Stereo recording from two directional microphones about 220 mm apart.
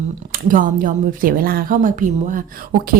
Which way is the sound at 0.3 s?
40° right (ahead or behind).